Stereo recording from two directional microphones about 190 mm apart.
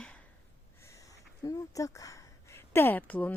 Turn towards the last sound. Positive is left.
turn(degrees=10)  # may be behind; listen again after turning